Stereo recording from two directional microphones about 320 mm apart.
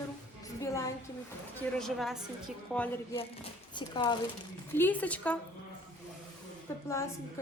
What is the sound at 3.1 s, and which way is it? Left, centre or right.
A woman's voice, centre.